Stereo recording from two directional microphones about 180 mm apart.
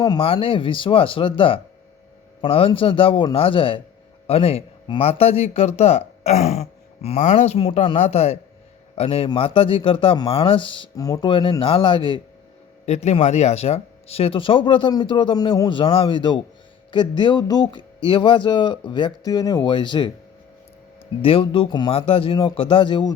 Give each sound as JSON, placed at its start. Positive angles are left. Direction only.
{"t": 0.0, "sound": "a man's voice", "side_deg": 25}
{"t": 12.8, "sound": "speech", "side_deg": 40}
{"t": 21.2, "sound": "speech", "side_deg": 30}